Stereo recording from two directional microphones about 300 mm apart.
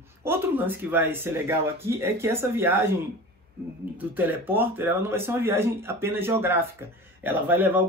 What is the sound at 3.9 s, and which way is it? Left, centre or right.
Speech, centre.